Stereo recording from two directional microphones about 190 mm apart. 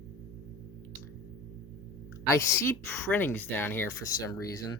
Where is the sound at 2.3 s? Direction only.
15° left (ahead or behind).